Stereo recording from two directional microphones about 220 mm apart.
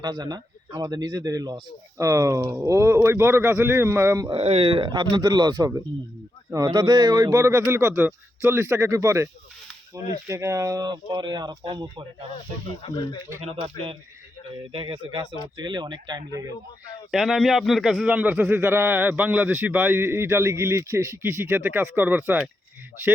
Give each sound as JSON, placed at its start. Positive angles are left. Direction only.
{"t": 0.0, "sound": "a man's voice", "side_deg": -20}
{"t": 4.3, "sound": "a man's voice", "side_deg": -25}
{"t": 12.8, "sound": "speech", "side_deg": 20}
{"t": 14.7, "sound": "speech", "side_deg": -25}
{"t": 17.1, "sound": "a man's voice", "side_deg": 0}